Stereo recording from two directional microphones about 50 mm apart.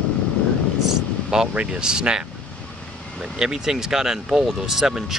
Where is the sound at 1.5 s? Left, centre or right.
Right.